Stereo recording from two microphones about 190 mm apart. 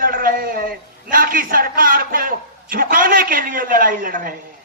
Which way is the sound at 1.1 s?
50° right (ahead or behind).